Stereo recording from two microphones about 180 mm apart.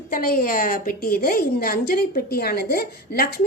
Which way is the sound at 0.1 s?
55° left (ahead or behind).